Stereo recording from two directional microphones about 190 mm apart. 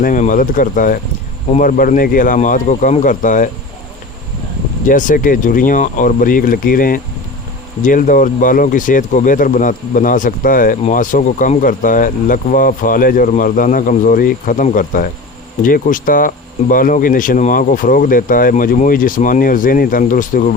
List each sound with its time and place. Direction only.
0.0 s speech: 45° left (ahead or behind)
4.9 s speech: 45° left (ahead or behind)